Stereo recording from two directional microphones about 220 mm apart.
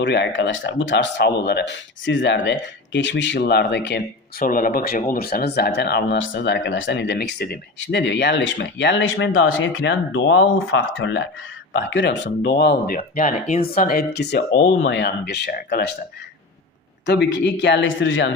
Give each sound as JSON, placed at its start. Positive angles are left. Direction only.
{"t": 0.0, "sound": "speech", "side_deg": 55}
{"t": 13.0, "sound": "speech", "side_deg": 35}
{"t": 17.1, "sound": "speech", "side_deg": 50}